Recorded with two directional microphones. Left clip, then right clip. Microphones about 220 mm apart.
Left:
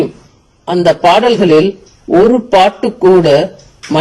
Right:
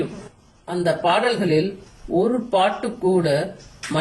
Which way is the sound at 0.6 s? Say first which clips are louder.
Left 12 dB; 35° left (ahead or behind).